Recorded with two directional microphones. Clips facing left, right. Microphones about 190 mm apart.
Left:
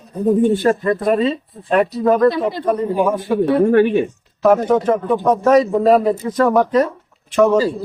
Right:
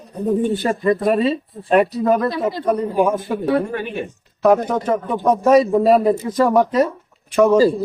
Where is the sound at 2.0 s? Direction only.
5° right (ahead or behind).